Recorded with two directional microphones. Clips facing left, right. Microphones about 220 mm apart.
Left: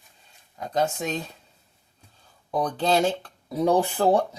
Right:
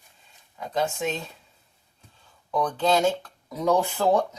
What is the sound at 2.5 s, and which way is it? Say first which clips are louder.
Speech: even; 35° left (ahead or behind).